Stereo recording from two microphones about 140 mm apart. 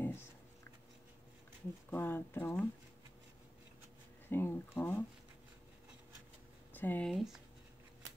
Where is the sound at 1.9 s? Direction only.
15° left (ahead or behind).